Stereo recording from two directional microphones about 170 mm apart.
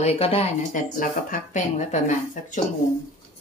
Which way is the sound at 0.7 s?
50° left (ahead or behind).